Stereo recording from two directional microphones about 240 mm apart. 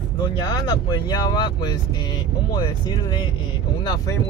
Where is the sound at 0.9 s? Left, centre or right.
Centre.